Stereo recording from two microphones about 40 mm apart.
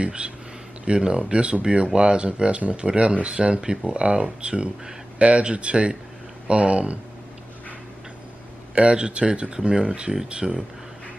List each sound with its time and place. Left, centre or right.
0.0 s speech: right
8.7 s speech: right